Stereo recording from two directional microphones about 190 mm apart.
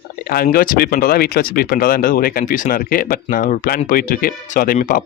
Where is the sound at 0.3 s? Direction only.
50° left (ahead or behind).